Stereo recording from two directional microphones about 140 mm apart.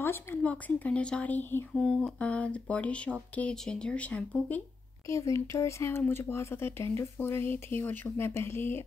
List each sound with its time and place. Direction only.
0.0 s speech: 15° left (ahead or behind)
1.7 s speech: 5° left (ahead or behind)
5.0 s speech: 20° left (ahead or behind)